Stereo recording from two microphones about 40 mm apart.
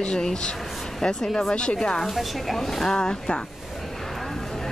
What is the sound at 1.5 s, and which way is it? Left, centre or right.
Speech, left.